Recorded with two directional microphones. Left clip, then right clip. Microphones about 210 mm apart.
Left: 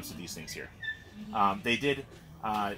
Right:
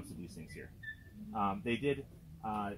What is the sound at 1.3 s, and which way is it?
Speech, 20° left (ahead or behind).